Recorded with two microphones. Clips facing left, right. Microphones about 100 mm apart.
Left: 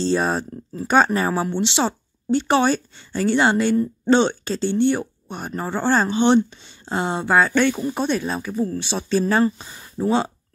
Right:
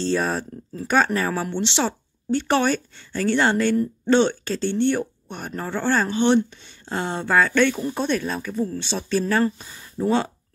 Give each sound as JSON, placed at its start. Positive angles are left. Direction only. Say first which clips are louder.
{"t": 0.1, "sound": "speech", "louder": "left 2 dB", "side_deg": 25}